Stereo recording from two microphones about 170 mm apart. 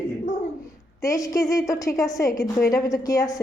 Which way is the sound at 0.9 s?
20° left (ahead or behind).